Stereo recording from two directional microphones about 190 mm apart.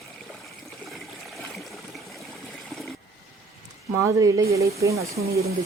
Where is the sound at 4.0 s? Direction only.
15° right (ahead or behind).